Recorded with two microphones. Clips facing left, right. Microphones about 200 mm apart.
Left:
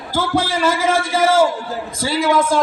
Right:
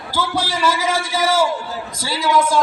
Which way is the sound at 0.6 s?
25° left (ahead or behind).